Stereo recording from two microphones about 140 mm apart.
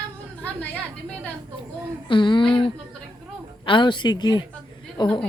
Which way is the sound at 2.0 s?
35° left (ahead or behind).